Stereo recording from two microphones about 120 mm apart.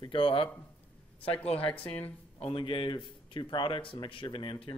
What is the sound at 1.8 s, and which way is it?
Speech, 55° left (ahead or behind).